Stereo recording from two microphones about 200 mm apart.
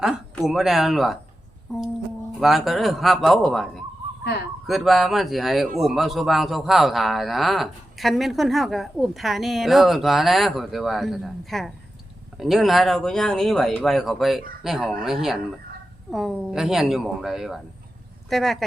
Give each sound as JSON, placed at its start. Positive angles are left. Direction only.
{"t": 0.0, "sound": "a man's voice", "side_deg": 0}